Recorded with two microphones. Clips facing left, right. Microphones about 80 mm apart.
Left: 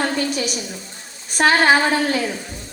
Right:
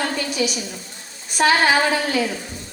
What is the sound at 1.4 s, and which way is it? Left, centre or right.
Speech, left.